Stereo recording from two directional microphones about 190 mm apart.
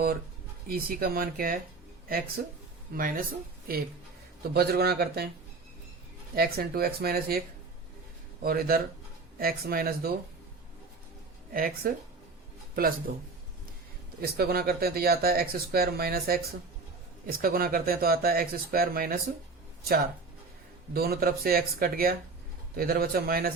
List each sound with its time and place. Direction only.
0.7 s speech: 50° right (ahead or behind)
4.5 s speech: 55° right (ahead or behind)
6.3 s speech: 55° right (ahead or behind)
11.5 s speech: 50° right (ahead or behind)
14.2 s speech: 55° right (ahead or behind)
20.9 s speech: 55° right (ahead or behind)